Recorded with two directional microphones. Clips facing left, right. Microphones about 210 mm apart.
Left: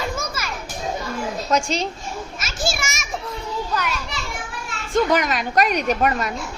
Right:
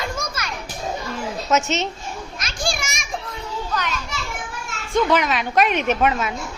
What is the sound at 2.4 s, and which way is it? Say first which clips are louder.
Children playing: even; 5° left (ahead or behind).